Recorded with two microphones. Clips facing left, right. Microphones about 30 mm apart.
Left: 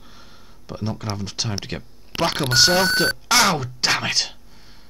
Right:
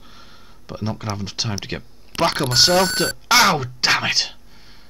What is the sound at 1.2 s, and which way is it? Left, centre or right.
Speech, centre.